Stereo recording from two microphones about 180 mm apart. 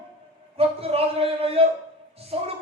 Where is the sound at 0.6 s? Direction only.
35° right (ahead or behind).